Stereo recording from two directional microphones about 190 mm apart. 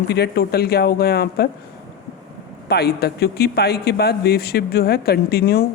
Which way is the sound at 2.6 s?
55° left (ahead or behind).